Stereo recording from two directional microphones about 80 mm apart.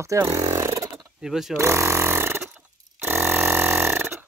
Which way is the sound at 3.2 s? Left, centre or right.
Right.